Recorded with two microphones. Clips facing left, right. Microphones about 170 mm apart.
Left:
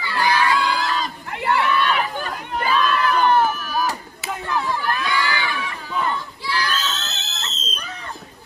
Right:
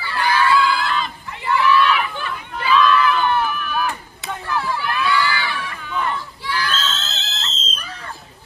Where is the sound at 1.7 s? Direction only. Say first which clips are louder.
Right 3 dB; 40° left (ahead or behind).